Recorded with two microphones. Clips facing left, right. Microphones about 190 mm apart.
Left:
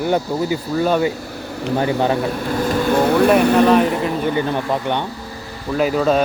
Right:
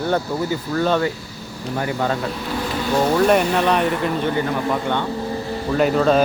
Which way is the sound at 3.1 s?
Centre (ahead or behind).